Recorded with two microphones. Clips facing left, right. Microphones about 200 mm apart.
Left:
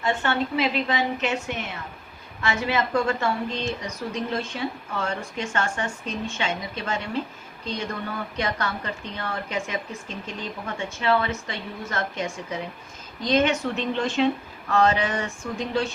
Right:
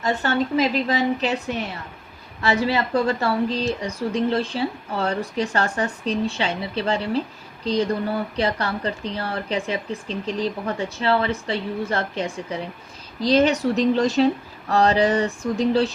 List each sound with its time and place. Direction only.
0.0 s a woman's voice: 40° right (ahead or behind)